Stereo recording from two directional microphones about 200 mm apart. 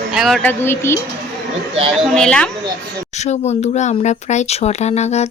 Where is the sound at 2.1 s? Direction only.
5° left (ahead or behind).